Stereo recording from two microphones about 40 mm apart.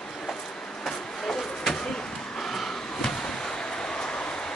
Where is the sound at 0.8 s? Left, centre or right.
Centre.